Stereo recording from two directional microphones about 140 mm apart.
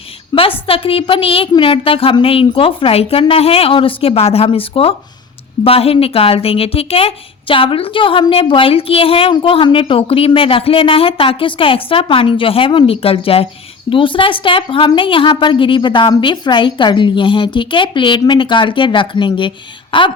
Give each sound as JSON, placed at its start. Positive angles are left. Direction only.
{"t": 0.3, "sound": "a woman's voice", "side_deg": 40}